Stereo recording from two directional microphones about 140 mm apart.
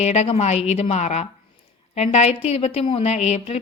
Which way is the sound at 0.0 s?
50° left (ahead or behind).